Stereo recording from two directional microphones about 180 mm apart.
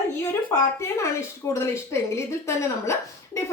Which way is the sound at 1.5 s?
15° left (ahead or behind).